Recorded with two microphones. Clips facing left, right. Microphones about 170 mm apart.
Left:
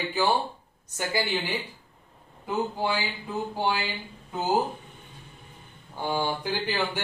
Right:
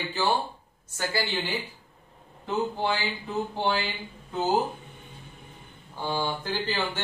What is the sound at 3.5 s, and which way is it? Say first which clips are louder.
Speech: even; 10° left (ahead or behind).